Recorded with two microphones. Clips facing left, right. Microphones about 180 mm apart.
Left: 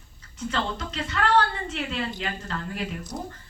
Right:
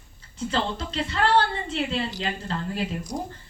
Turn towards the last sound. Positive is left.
turn(degrees=-25)  # may be behind; listen again after turning